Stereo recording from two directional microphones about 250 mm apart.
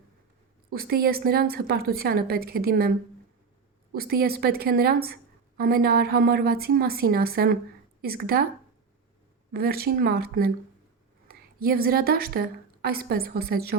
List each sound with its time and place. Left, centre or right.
0.7 s a woman's voice: right
3.9 s a woman's voice: right
9.5 s a woman's voice: right